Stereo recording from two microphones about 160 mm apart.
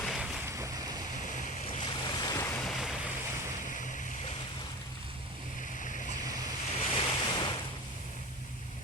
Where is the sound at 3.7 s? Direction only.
55° left (ahead or behind).